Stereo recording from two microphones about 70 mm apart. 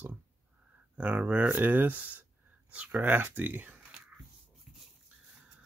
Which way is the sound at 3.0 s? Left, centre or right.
Right.